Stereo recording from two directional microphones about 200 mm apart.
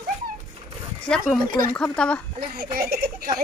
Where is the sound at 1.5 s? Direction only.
45° right (ahead or behind).